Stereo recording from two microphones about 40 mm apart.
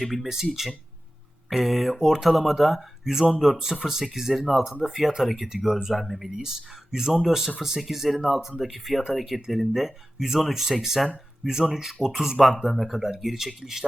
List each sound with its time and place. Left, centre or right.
0.0 s speech: centre
0.6 s speech: centre
6.3 s speech: centre
7.1 s speech: centre
11.4 s speech: centre
11.7 s speech: centre
12.6 s speech: centre